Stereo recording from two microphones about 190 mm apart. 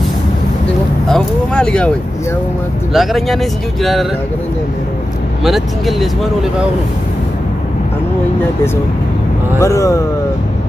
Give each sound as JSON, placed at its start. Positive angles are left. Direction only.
{"t": 1.1, "sound": "speech", "side_deg": 5}
{"t": 2.9, "sound": "speech", "side_deg": 0}
{"t": 5.4, "sound": "speech", "side_deg": 0}
{"t": 9.6, "sound": "speech", "side_deg": 15}